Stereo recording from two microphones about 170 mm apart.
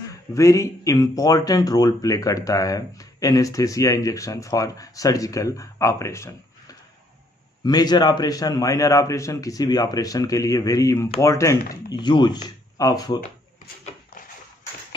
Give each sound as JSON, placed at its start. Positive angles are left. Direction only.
{"t": 0.1, "sound": "speech", "side_deg": 20}